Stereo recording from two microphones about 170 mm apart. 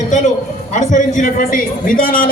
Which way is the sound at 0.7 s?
45° left (ahead or behind).